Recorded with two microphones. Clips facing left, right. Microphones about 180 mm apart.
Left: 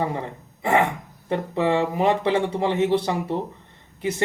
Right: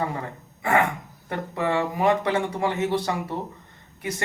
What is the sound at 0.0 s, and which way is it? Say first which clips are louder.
Speech: left 2 dB; 25° left (ahead or behind).